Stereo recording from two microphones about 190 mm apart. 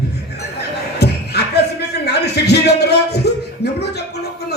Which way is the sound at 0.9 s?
60° left (ahead or behind).